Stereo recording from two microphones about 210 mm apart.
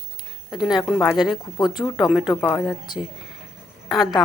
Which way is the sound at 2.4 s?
15° left (ahead or behind).